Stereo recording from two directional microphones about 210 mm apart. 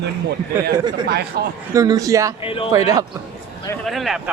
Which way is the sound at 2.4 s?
25° left (ahead or behind).